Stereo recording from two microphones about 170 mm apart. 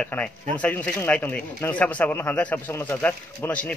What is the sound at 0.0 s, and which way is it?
Speech, 5° left (ahead or behind).